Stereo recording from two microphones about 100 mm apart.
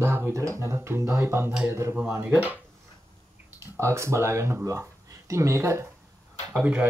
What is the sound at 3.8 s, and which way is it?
Speech, 30° right (ahead or behind).